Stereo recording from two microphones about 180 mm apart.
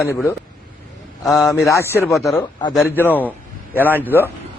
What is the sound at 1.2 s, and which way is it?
Speech, centre (ahead or behind).